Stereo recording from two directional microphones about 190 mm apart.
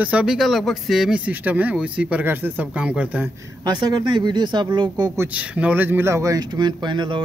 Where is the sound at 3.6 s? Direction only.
20° right (ahead or behind).